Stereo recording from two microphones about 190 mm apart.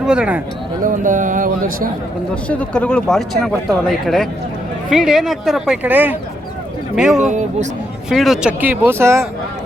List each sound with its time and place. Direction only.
0.0 s speech: 5° right (ahead or behind)
0.8 s a man's voice: 45° right (ahead or behind)
2.3 s speech: 5° left (ahead or behind)
7.3 s speech: 40° right (ahead or behind)
8.1 s speech: centre (ahead or behind)